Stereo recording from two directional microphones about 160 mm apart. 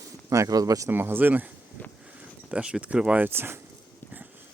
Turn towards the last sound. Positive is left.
turn(degrees=-15)  # may be behind; listen again after turning